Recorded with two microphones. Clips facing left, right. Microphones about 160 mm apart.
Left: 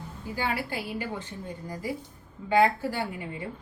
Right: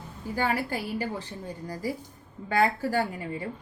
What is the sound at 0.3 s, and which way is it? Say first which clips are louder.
Speech: right 3 dB; 45° right (ahead or behind).